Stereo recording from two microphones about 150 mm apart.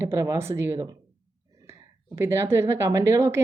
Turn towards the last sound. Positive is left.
turn(degrees=-20)  # may be behind; listen again after turning